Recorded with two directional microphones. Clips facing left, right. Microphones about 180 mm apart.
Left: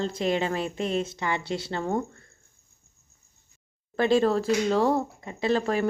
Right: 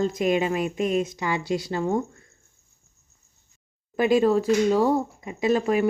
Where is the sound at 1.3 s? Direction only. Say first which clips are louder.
Right 3 dB; 25° left (ahead or behind).